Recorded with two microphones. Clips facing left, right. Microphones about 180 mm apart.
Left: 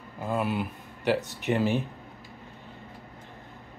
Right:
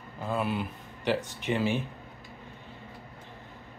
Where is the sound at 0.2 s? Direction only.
10° left (ahead or behind).